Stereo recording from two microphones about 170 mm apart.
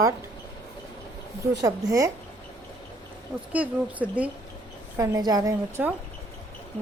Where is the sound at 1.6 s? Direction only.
20° right (ahead or behind).